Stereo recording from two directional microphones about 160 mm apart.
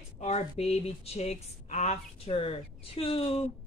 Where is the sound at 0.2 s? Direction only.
45° left (ahead or behind).